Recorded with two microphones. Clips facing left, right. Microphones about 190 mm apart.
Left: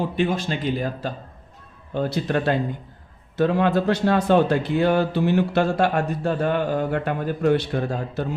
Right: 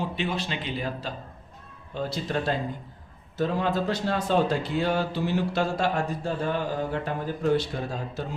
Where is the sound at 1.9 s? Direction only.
60° left (ahead or behind).